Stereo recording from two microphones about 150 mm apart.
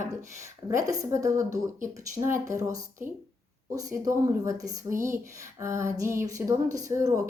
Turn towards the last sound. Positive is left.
turn(degrees=-20)  # may be behind; listen again after turning